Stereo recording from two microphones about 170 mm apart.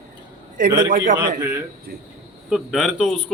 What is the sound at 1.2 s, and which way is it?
Speech, 15° right (ahead or behind).